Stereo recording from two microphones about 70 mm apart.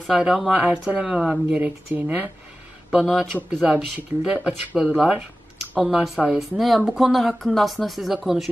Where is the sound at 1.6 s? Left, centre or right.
Right.